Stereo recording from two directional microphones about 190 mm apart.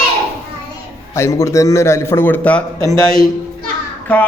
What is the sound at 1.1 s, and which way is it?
A woman's voice, 15° left (ahead or behind).